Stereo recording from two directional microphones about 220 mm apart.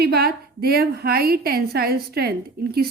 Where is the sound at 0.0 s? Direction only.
45° right (ahead or behind).